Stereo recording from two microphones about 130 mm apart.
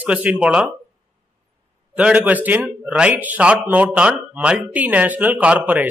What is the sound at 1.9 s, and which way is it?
Speech, 10° right (ahead or behind).